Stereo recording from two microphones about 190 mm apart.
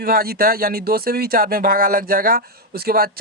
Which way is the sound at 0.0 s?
50° right (ahead or behind).